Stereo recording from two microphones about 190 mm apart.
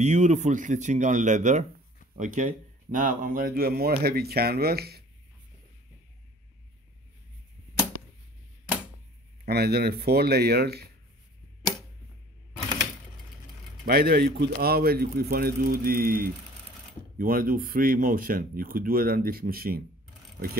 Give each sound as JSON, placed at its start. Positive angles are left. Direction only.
{"t": 0.0, "sound": "speech", "side_deg": -40}
{"t": 9.5, "sound": "speech", "side_deg": -55}
{"t": 13.8, "sound": "speech", "side_deg": -55}